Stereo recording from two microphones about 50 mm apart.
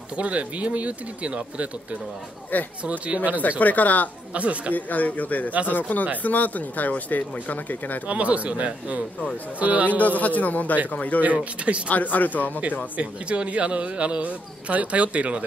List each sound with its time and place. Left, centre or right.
0.2 s speech: right
3.4 s speech: left
4.3 s speech: right
4.7 s speech: left
8.1 s a man's voice: right
9.9 s speech: left
11.3 s speech: right
11.9 s speech: left
12.9 s speech: right